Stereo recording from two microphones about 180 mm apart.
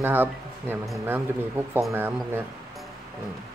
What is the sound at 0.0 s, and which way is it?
A man's voice, 10° right (ahead or behind).